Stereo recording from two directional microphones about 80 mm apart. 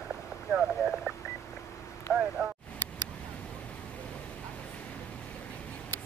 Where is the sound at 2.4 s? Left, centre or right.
Centre.